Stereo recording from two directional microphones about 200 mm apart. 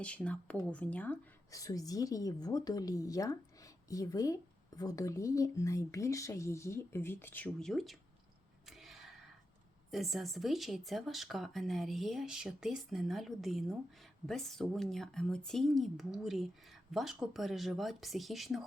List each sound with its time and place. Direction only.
0.0 s a woman's voice: 5° left (ahead or behind)
8.6 s a sound: centre (ahead or behind)
9.9 s speech: centre (ahead or behind)